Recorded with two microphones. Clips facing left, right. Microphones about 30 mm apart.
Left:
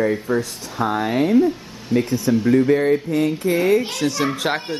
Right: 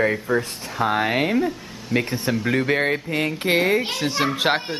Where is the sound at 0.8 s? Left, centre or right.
Right.